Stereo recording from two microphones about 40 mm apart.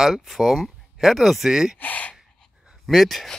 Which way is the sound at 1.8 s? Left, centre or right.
Left.